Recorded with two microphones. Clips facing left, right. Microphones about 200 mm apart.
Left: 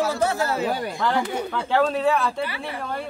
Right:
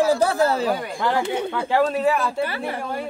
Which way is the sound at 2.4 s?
45° right (ahead or behind).